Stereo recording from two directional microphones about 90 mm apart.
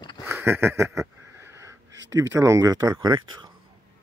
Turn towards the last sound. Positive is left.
turn(degrees=-60)  # may be behind; listen again after turning